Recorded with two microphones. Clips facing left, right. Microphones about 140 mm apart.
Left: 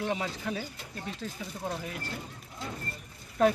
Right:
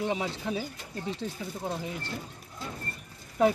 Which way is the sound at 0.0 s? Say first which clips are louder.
Right 2 dB; 10° right (ahead or behind).